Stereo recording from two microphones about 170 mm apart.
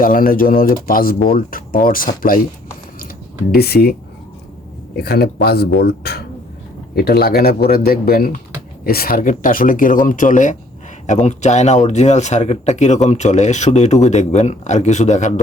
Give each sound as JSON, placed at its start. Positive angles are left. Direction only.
{"t": 0.0, "sound": "speech", "side_deg": 55}
{"t": 3.5, "sound": "speech", "side_deg": 65}
{"t": 4.9, "sound": "speech", "side_deg": 65}